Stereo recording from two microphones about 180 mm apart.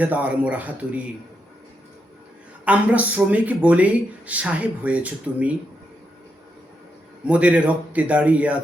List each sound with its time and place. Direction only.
0.0 s speech: 10° right (ahead or behind)
2.6 s speech: 10° right (ahead or behind)
7.3 s speech: 5° right (ahead or behind)